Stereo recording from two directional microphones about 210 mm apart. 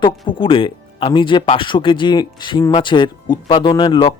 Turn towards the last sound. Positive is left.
turn(degrees=25)  # may be behind; listen again after turning